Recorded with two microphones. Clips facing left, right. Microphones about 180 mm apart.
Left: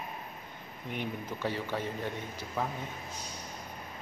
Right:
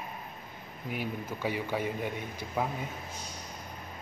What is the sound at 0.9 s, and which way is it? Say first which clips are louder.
A man's voice: right 1 dB; 5° right (ahead or behind).